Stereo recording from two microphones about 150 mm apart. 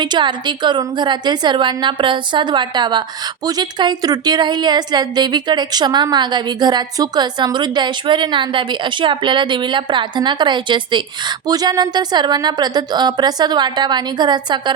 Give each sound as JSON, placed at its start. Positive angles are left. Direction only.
{"t": 0.0, "sound": "a woman's voice", "side_deg": -30}